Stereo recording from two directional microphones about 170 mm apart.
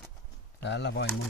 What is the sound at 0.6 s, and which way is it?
Speech, 85° left.